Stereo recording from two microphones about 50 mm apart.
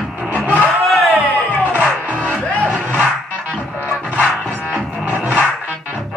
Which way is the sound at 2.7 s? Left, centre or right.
Right.